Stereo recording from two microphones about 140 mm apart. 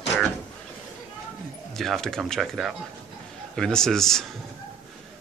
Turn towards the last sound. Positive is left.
turn(degrees=5)  # may be behind; listen again after turning